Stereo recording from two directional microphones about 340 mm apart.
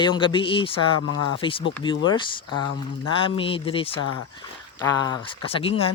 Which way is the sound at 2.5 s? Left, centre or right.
Left.